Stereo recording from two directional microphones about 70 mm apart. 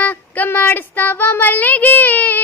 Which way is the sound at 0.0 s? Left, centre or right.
Left.